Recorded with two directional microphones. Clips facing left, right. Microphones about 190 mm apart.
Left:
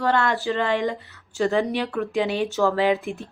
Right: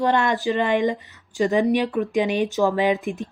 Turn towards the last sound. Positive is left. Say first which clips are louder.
# even
turn(degrees=-15)  # may be behind; listen again after turning